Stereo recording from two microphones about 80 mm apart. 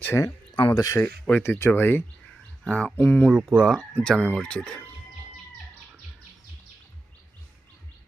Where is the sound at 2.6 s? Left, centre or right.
Centre.